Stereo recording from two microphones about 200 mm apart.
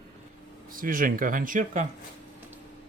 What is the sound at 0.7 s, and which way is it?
Speech, 45° right (ahead or behind).